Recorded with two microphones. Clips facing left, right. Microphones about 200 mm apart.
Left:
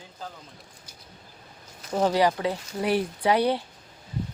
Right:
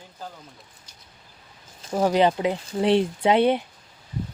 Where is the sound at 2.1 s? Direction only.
20° right (ahead or behind).